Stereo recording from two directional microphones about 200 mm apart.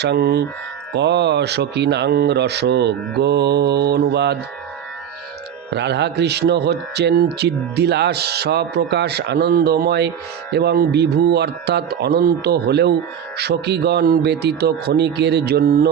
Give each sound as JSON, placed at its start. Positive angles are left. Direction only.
{"t": 0.0, "sound": "a man's voice", "side_deg": -55}
{"t": 5.7, "sound": "a man's voice", "side_deg": -60}